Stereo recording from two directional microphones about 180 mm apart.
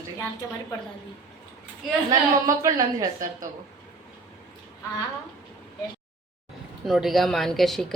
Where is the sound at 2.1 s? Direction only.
20° right (ahead or behind).